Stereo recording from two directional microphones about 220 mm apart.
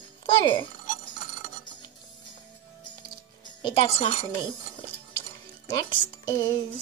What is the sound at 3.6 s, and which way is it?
Speech, 25° left (ahead or behind).